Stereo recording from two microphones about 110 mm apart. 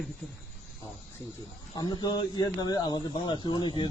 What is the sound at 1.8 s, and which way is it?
Speech, 40° left (ahead or behind).